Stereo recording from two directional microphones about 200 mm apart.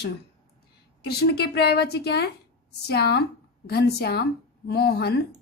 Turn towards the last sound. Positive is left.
turn(degrees=55)  # may be behind; listen again after turning